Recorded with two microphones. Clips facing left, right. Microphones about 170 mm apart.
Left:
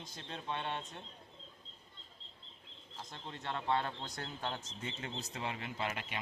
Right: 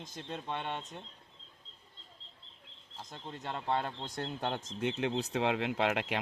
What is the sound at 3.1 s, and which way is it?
Speech, 10° right (ahead or behind).